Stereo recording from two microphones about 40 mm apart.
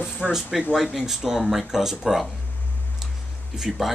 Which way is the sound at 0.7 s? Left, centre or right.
Centre.